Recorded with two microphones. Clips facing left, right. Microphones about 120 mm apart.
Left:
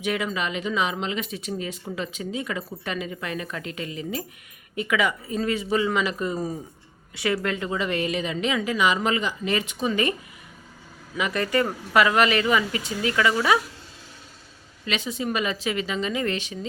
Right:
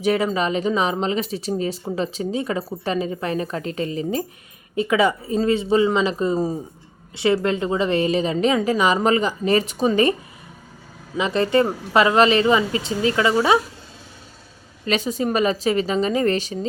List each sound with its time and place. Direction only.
0.0 s speech: 35° right (ahead or behind)
11.2 s speech: 25° right (ahead or behind)
14.8 s speech: 40° right (ahead or behind)